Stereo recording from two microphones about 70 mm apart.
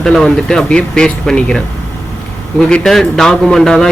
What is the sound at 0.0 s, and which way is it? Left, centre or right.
A man's voice, centre.